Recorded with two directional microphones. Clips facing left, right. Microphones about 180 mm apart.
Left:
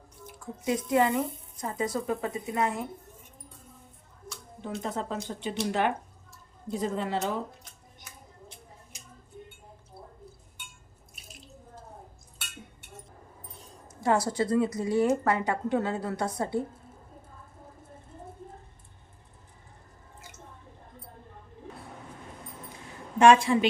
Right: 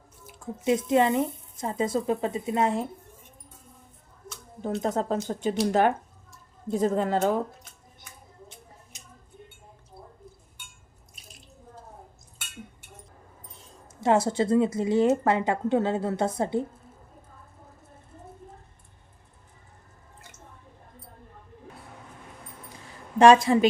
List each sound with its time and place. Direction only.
0.3 s speech: 25° right (ahead or behind)
4.6 s speech: 40° right (ahead or behind)
14.0 s speech: 25° right (ahead or behind)
23.1 s speech: 35° right (ahead or behind)